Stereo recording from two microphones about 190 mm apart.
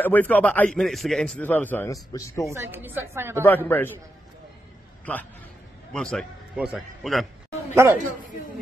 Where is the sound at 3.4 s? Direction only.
10° left (ahead or behind).